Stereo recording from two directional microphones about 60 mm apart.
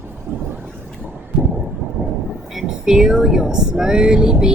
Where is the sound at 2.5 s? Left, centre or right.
Centre.